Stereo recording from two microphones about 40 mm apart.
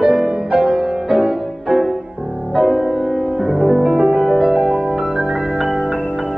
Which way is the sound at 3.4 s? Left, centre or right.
Right.